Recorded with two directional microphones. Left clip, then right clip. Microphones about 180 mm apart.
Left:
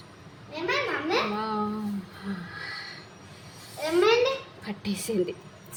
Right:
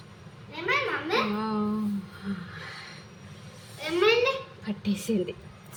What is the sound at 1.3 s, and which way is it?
Speech, centre (ahead or behind).